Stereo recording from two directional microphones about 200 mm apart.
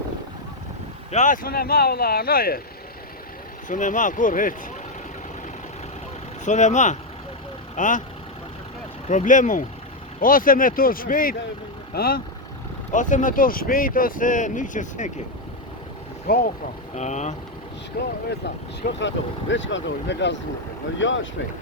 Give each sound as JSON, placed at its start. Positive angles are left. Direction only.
{"t": 1.1, "sound": "speech", "side_deg": 40}
{"t": 3.7, "sound": "speech", "side_deg": 40}
{"t": 6.4, "sound": "speech", "side_deg": 35}
{"t": 9.0, "sound": "speech", "side_deg": 40}
{"t": 12.9, "sound": "speech", "side_deg": 40}
{"t": 16.3, "sound": "speech", "side_deg": 50}
{"t": 16.9, "sound": "speech", "side_deg": 35}
{"t": 18.0, "sound": "speech", "side_deg": 45}
{"t": 18.8, "sound": "speech", "side_deg": 60}